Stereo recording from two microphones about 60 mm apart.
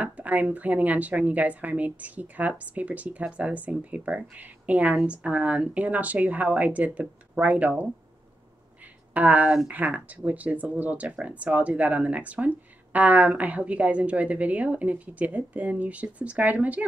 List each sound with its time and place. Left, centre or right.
0.0 s a woman's voice: right
9.1 s a woman's voice: right